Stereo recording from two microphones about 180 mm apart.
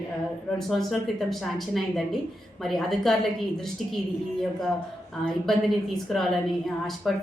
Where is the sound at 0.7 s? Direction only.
Centre (ahead or behind).